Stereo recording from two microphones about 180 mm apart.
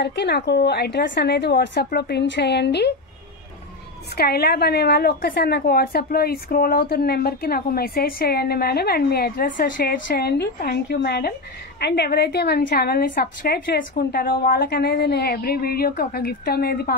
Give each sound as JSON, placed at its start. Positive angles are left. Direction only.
{"t": 0.0, "sound": "a woman's voice", "side_deg": 70}
{"t": 4.1, "sound": "a woman's voice", "side_deg": 60}